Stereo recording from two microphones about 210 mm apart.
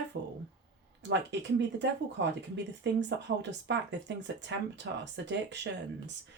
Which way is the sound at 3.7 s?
55° right (ahead or behind).